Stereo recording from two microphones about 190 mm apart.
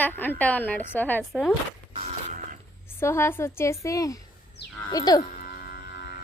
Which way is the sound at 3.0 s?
15° left (ahead or behind).